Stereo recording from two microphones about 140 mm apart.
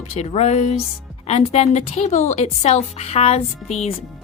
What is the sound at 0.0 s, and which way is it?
Speech, 50° left (ahead or behind).